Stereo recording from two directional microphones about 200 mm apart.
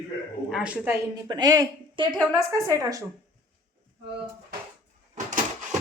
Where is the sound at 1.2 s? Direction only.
20° right (ahead or behind).